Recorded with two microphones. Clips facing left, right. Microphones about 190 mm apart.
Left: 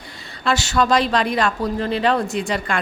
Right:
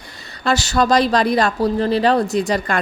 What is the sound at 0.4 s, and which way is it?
Speech, 40° right (ahead or behind).